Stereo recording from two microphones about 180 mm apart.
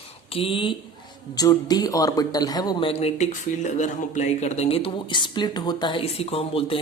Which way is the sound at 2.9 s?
35° left (ahead or behind).